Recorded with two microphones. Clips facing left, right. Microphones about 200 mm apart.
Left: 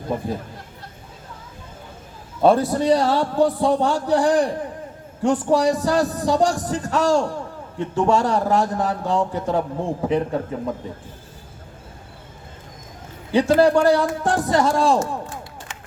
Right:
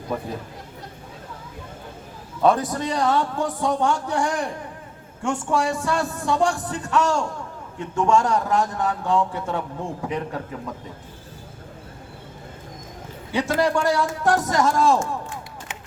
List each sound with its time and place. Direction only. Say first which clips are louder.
2.4 s a man's voice: left 4 dB; 30° left (ahead or behind)
13.3 s a man's voice: left 6 dB; 30° left (ahead or behind)